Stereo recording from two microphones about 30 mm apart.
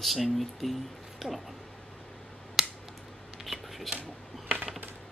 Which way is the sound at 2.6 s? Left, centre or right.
Centre.